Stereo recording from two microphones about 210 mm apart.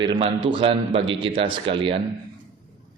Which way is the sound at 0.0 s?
20° right (ahead or behind).